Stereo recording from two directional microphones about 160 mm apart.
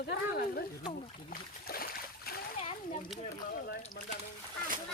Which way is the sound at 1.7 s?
70° left (ahead or behind).